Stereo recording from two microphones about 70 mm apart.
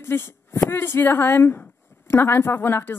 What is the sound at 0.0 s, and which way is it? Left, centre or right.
A woman's voice, left.